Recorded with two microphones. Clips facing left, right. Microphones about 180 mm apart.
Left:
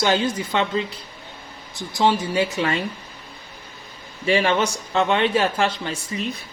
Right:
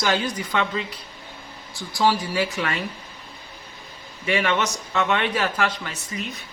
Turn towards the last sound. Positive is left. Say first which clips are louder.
# left 4 dB
turn(degrees=30)  # may be behind; listen again after turning